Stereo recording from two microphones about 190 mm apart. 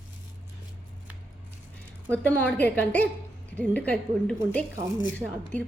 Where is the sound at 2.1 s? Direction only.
5° left (ahead or behind).